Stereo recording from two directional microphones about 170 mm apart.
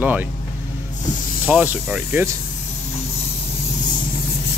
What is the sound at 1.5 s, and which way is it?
Speech, 5° right (ahead or behind).